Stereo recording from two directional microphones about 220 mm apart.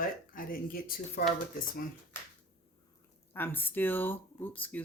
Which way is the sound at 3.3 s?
10° left (ahead or behind).